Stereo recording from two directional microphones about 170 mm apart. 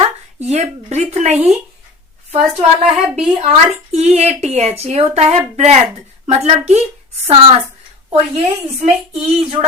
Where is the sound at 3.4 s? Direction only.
40° right (ahead or behind).